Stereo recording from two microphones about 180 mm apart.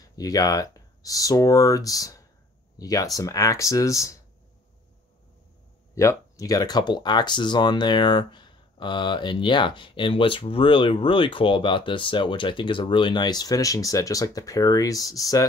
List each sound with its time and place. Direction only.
0.0 s speech: 20° left (ahead or behind)
5.9 s speech: 20° left (ahead or behind)